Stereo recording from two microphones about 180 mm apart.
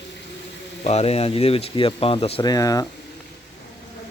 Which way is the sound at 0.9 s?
35° left (ahead or behind).